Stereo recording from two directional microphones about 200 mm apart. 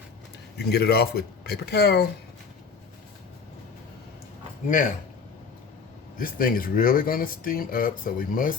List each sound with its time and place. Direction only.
0.5 s speech: 55° left (ahead or behind)
6.1 s speech: 45° left (ahead or behind)